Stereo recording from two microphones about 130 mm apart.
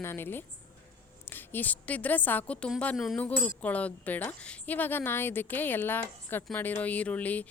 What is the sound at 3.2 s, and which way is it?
A woman's voice, 10° left (ahead or behind).